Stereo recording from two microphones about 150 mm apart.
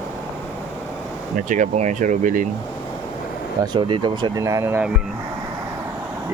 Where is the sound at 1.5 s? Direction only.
55° right (ahead or behind).